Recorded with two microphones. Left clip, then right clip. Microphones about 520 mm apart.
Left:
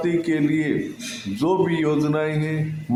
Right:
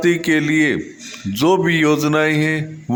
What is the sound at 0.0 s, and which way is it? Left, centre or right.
Speech, centre.